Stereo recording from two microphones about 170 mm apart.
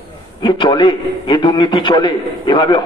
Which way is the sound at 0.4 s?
25° left (ahead or behind).